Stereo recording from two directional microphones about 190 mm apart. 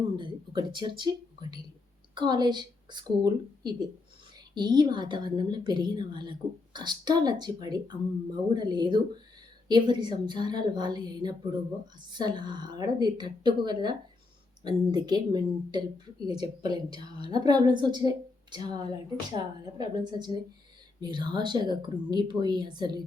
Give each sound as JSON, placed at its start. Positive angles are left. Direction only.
{"t": 0.2, "sound": "a woman's voice", "side_deg": -25}